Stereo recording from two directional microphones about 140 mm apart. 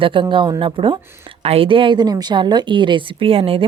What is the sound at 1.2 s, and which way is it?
Speech, 45° right (ahead or behind).